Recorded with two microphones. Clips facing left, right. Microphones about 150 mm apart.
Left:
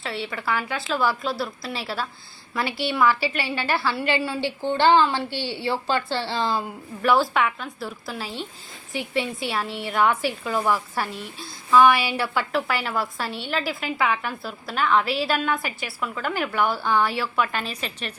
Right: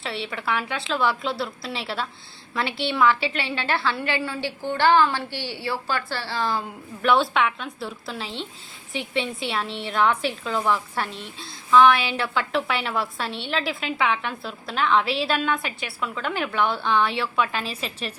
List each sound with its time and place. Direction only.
0.0 s a woman's voice: centre (ahead or behind); by 6.6 s 20° left (ahead or behind)
7.0 s a woman's voice: 5° left (ahead or behind)